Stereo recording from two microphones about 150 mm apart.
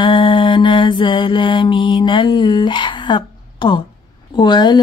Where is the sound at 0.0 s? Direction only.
35° left (ahead or behind).